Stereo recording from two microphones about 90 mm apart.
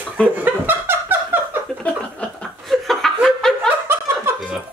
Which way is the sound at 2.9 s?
5° left (ahead or behind).